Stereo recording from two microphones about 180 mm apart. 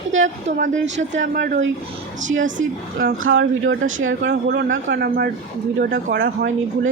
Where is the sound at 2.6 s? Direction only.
50° right (ahead or behind).